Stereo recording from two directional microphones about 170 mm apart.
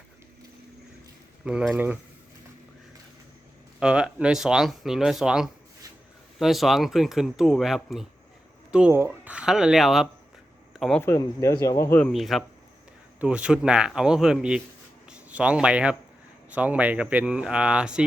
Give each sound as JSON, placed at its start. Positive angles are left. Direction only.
{"t": 1.5, "sound": "speech", "side_deg": -5}
{"t": 3.8, "sound": "speech", "side_deg": -5}
{"t": 11.0, "sound": "speech", "side_deg": 15}